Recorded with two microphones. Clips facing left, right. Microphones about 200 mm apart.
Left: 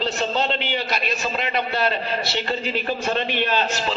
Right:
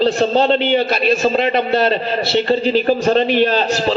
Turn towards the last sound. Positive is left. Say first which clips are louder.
# right 8 dB
turn(degrees=-35)  # may be behind; listen again after turning